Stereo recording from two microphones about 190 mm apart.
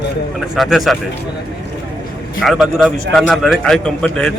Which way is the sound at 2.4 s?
Centre (ahead or behind).